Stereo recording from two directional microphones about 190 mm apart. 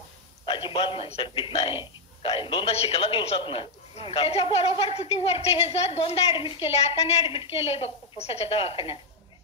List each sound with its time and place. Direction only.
0.5 s a man's voice: 25° left (ahead or behind)